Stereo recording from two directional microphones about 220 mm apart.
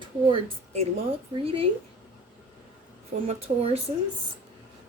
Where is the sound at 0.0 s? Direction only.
25° right (ahead or behind).